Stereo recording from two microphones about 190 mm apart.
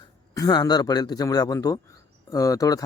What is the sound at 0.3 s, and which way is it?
A man's voice, 20° left (ahead or behind).